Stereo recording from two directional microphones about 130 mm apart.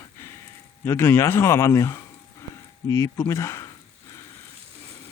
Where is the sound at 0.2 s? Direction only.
15° left (ahead or behind).